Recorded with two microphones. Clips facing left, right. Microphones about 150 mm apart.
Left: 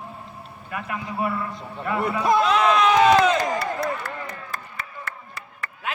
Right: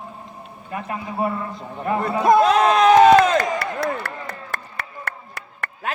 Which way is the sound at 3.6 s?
80° right.